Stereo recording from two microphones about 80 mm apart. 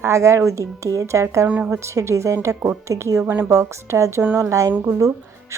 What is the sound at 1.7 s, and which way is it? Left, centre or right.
A woman's voice, right.